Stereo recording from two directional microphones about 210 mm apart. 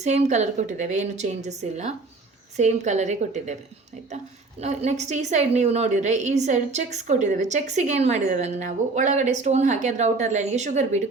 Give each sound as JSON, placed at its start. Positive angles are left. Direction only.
{"t": 0.0, "sound": "a woman's voice", "side_deg": -35}
{"t": 4.6, "sound": "a woman's voice", "side_deg": -30}